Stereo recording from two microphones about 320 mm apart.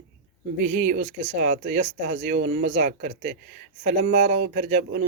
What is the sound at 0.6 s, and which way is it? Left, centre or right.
Speech, right.